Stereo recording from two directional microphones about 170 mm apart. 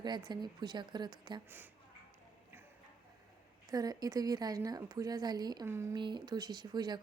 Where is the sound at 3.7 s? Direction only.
20° right (ahead or behind).